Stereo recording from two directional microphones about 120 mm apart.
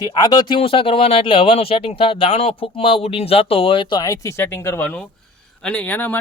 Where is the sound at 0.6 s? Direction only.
50° left (ahead or behind).